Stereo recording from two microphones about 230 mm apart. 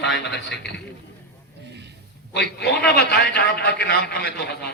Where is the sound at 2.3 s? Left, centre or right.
Left.